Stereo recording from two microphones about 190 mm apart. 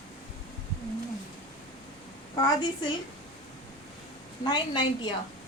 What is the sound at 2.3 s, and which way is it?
Speech, 25° left (ahead or behind).